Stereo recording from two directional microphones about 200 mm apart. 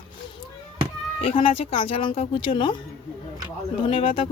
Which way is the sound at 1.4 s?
25° left (ahead or behind).